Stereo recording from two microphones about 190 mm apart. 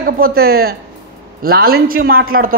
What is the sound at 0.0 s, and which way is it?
Speech, 50° right (ahead or behind).